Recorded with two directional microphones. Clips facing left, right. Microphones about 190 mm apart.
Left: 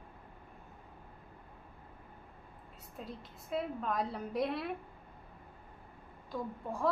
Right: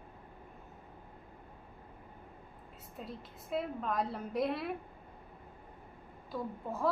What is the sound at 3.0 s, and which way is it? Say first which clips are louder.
A woman's voice: even; centre (ahead or behind).